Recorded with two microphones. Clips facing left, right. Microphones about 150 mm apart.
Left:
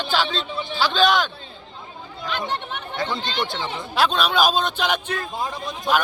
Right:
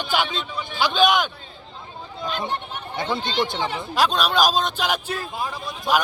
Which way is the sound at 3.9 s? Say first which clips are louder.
Left 1 dB; 5° right (ahead or behind).